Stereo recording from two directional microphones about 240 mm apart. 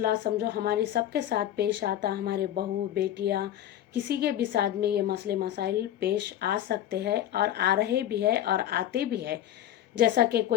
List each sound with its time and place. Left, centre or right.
0.0 s a woman's voice: right